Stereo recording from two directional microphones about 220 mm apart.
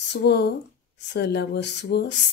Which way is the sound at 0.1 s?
50° left (ahead or behind).